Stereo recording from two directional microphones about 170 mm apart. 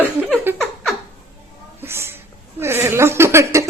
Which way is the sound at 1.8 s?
15° right (ahead or behind).